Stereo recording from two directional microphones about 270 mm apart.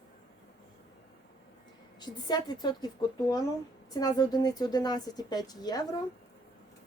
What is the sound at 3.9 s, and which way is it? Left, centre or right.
A woman's voice, centre.